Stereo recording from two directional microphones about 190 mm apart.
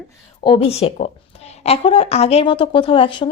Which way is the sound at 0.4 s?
30° left (ahead or behind).